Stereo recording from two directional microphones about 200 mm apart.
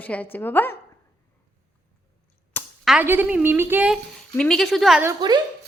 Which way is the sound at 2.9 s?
10° right (ahead or behind).